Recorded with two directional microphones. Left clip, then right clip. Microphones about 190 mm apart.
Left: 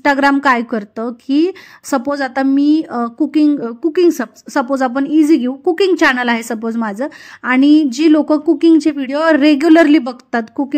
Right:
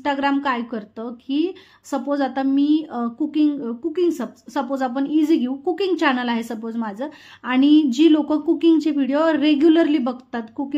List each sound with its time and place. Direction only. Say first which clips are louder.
0.0 s a woman's voice: left 9 dB; 40° left (ahead or behind)